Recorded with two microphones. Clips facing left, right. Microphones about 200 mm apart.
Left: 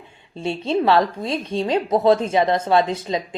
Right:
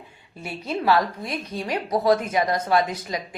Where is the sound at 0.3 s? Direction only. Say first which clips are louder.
Left 8 dB; 25° left (ahead or behind).